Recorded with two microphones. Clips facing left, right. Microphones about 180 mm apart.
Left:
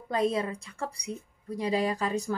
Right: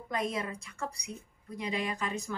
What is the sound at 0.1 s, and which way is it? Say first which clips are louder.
A woman's voice: left 6 dB; 30° left (ahead or behind).